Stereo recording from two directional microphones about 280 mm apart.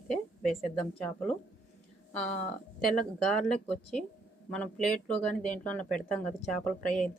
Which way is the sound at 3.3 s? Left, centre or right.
Centre.